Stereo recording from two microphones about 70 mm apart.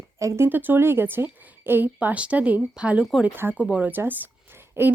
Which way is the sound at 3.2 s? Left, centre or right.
Right.